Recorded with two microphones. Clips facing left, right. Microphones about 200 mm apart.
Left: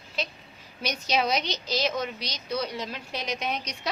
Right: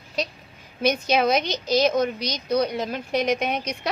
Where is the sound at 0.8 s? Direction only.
55° right (ahead or behind).